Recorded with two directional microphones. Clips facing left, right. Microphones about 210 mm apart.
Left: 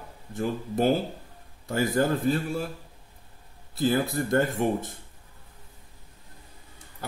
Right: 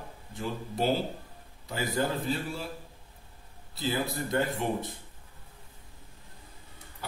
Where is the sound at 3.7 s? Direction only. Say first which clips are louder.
Left 7 dB; 50° left (ahead or behind).